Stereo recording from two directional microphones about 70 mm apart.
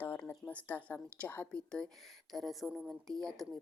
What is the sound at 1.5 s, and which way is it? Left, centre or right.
Speech, centre.